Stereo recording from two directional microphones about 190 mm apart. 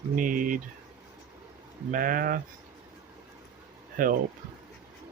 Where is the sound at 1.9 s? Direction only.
45° right (ahead or behind).